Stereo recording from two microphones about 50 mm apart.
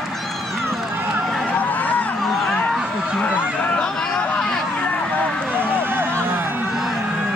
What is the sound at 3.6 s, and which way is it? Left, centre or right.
Chatter, left.